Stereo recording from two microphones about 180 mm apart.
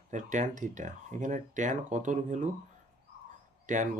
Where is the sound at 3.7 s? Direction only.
45° right (ahead or behind).